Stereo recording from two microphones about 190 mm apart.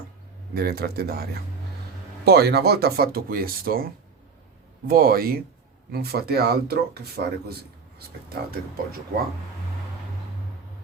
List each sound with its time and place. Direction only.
0.5 s speech: 55° right (ahead or behind)
2.2 s speech: 55° right (ahead or behind)
4.9 s speech: 50° right (ahead or behind)